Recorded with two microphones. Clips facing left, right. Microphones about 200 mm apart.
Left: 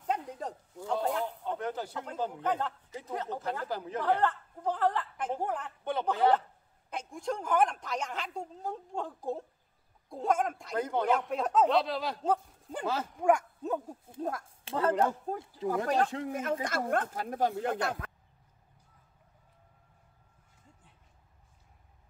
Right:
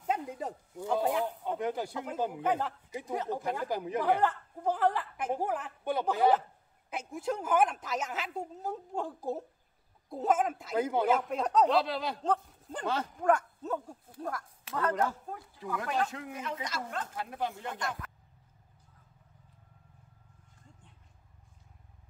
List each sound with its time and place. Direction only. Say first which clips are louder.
0.0 s speech: right 1 dB; 5° right (ahead or behind); by 16.3 s 30° left (ahead or behind)
16.3 s speech: left 5 dB; 45° left (ahead or behind); by 18.1 s 65° left (ahead or behind)